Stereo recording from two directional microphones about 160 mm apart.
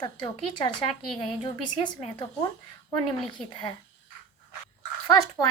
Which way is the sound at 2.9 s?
30° left (ahead or behind).